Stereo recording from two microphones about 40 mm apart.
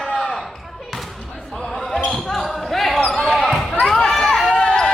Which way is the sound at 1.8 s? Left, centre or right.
Centre.